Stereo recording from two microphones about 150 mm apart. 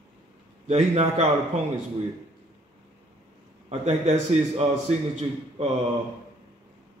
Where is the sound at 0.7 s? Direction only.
50° right (ahead or behind).